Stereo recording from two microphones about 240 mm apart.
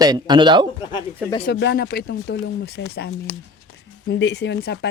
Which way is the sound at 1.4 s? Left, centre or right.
Left.